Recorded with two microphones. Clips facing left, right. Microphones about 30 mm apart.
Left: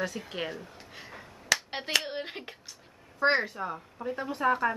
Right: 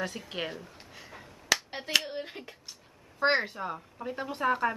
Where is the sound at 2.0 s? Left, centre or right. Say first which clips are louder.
Left 2 dB; left.